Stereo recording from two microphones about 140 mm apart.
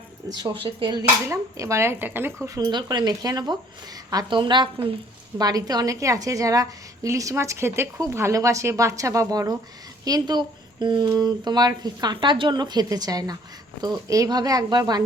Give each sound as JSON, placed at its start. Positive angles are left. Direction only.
{"t": 0.3, "sound": "a woman's voice", "side_deg": -30}
{"t": 1.3, "sound": "speech", "side_deg": -20}
{"t": 2.6, "sound": "a woman's voice", "side_deg": -30}